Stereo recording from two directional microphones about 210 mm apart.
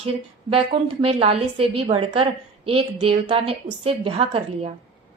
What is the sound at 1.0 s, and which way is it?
A woman's voice, 25° right (ahead or behind).